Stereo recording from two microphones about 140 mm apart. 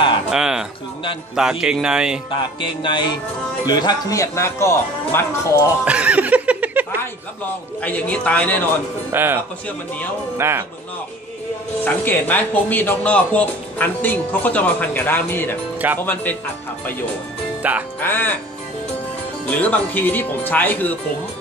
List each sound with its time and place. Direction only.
0.3 s music: 5° right (ahead or behind)
1.3 s speech: 5° right (ahead or behind)
2.6 s a sound: 35° left (ahead or behind)
3.6 s speech: 30° left (ahead or behind)
5.9 s snicker: 10° right (ahead or behind)
7.8 s speech: 10° left (ahead or behind)
9.1 s speech: 15° right (ahead or behind)
11.8 s speech: 10° left (ahead or behind)
17.6 s music: 10° right (ahead or behind)
18.0 s speech: 15° left (ahead or behind)
19.4 s speech: 10° left (ahead or behind)